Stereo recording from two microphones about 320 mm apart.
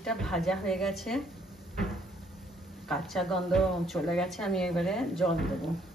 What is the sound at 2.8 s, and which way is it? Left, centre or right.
Speech, centre.